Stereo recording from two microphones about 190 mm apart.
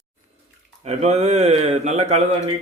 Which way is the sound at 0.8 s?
35° right (ahead or behind).